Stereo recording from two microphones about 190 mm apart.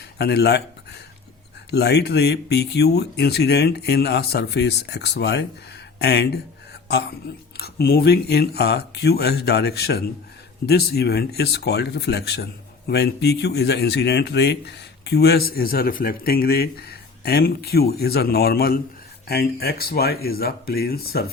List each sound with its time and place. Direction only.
0.2 s speech: 60° left (ahead or behind)
7.5 s speech: 55° left (ahead or behind)